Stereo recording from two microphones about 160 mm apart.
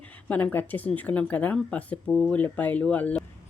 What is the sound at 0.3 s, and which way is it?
Speech, 10° left (ahead or behind).